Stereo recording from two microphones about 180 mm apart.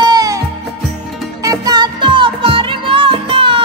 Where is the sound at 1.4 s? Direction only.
20° right (ahead or behind).